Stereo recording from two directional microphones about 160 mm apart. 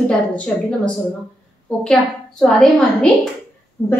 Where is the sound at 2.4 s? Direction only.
5° left (ahead or behind).